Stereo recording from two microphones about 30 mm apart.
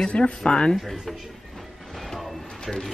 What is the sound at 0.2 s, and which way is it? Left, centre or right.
Speech, left.